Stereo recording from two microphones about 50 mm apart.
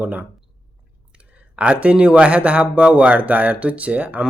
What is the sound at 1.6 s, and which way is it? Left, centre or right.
Speech, right.